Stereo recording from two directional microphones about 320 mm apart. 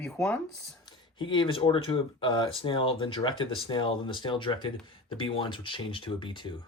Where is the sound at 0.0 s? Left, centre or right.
Centre.